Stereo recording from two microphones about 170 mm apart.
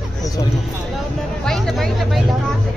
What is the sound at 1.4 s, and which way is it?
Speech, centre (ahead or behind).